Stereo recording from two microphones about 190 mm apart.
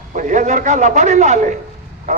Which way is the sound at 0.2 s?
40° right (ahead or behind).